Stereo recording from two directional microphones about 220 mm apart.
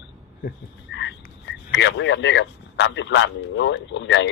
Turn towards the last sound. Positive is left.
turn(degrees=55)  # may be behind; listen again after turning